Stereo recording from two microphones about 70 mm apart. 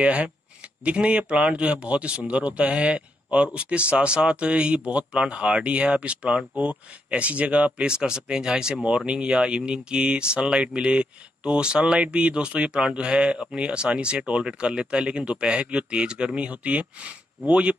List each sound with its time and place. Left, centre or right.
0.0 s speech: centre